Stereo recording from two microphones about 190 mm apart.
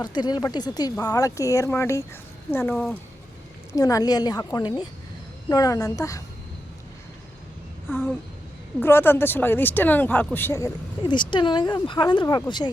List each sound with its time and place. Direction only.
0.0 s a woman's voice: 20° left (ahead or behind)
7.9 s speech: 10° left (ahead or behind)